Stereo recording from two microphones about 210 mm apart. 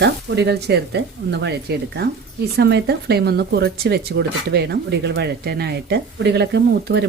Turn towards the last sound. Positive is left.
turn(degrees=-50)  # may be behind; listen again after turning